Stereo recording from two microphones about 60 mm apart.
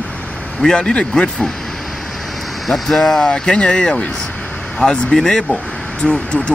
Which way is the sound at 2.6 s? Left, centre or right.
Centre.